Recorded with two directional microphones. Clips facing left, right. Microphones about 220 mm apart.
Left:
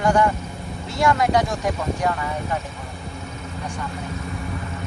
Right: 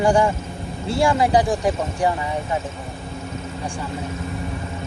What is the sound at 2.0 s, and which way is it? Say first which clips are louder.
Music: right 5 dB; 20° right (ahead or behind).